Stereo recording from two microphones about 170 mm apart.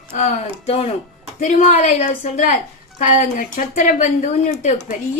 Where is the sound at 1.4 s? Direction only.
50° left (ahead or behind).